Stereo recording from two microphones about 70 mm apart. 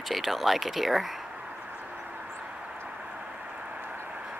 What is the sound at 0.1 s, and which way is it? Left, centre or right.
Speech, centre.